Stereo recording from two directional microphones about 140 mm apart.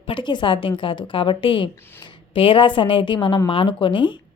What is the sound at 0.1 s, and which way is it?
Speech, 35° left (ahead or behind).